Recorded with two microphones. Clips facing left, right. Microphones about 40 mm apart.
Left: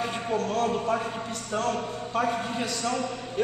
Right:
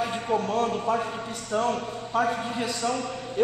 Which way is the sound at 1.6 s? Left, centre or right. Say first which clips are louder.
Right 2 dB; right.